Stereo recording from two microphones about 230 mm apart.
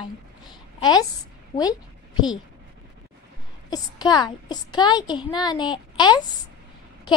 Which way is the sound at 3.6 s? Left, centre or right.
Centre.